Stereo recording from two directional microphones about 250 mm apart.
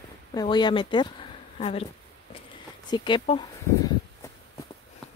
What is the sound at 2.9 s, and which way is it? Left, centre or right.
Speech, centre.